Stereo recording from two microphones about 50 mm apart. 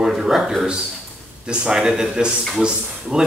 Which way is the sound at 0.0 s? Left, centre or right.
Centre.